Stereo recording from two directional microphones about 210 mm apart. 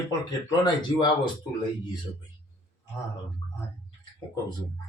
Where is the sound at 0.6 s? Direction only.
20° left (ahead or behind).